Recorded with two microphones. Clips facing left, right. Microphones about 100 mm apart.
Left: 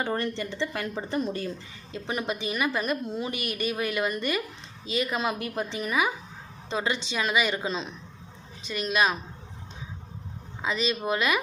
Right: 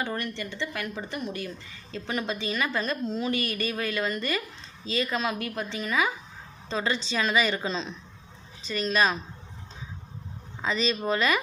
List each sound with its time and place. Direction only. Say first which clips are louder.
0.1 s speech: left 4 dB; 30° left (ahead or behind)
1.9 s a woman's voice: even; 20° left (ahead or behind)
10.6 s a woman's voice: right 1 dB; 5° left (ahead or behind)